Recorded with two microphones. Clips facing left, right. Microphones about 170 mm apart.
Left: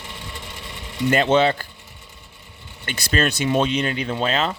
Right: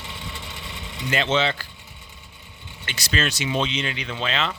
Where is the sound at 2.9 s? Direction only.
50° left (ahead or behind).